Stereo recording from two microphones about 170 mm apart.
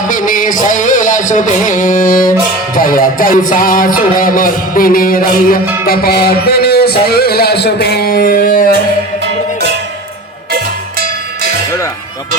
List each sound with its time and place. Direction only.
0.1 s music: 50° left (ahead or behind)
2.7 s speech: 55° left (ahead or behind)
11.0 s music: 65° right (ahead or behind)